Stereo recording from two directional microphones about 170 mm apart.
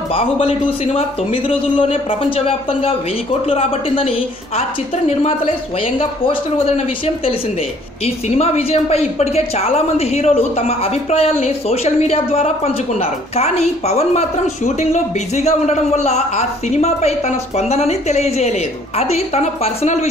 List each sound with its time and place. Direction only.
0.1 s a woman's voice: 35° left (ahead or behind)
5.9 s a woman's voice: 35° left (ahead or behind)
8.4 s a woman's voice: 40° left (ahead or behind)